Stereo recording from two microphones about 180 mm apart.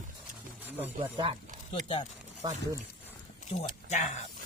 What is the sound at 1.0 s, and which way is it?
Speech, 25° right (ahead or behind).